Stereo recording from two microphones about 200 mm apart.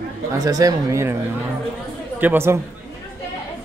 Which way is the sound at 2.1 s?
10° right (ahead or behind).